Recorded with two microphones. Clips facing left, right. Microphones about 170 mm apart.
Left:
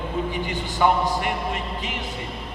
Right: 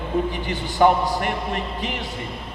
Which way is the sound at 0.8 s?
40° right (ahead or behind).